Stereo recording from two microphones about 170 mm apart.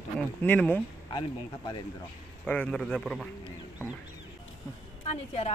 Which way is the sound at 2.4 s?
5° left (ahead or behind).